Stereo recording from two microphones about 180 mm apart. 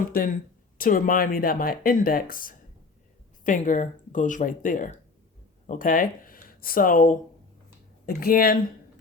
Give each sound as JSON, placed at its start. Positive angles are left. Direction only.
{"t": 0.0, "sound": "speech", "side_deg": 50}